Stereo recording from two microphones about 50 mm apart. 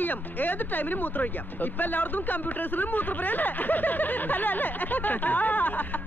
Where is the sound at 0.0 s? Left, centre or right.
Left.